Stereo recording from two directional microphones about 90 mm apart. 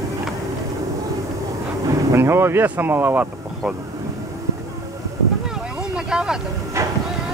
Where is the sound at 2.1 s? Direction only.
30° right (ahead or behind).